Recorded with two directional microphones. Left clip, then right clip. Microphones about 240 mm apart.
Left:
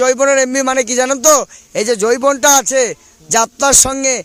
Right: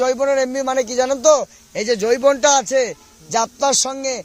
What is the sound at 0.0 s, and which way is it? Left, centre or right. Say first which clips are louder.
A man's voice: left 5 dB; left.